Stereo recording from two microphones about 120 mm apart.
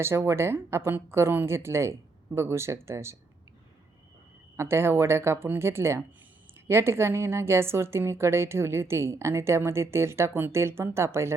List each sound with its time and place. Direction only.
0.0 s a woman's voice: 20° right (ahead or behind)
4.5 s a woman's voice: 20° right (ahead or behind)